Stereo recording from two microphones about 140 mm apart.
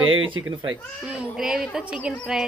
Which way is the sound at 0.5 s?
35° right (ahead or behind).